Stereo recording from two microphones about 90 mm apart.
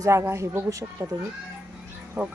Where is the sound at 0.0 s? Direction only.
30° right (ahead or behind).